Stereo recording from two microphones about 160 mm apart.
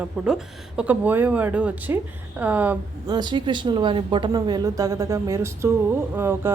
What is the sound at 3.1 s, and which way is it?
A woman's voice, 30° right (ahead or behind).